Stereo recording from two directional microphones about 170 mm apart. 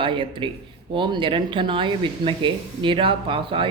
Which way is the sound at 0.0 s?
30° right (ahead or behind).